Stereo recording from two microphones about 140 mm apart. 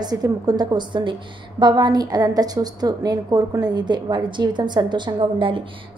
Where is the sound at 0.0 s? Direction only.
30° right (ahead or behind).